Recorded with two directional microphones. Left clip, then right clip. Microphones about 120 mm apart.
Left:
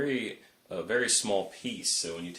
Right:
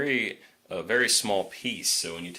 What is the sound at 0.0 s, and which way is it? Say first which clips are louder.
Speech: right 5 dB; 25° right (ahead or behind).